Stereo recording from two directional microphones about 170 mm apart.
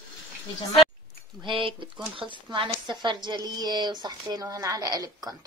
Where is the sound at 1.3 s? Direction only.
30° right (ahead or behind).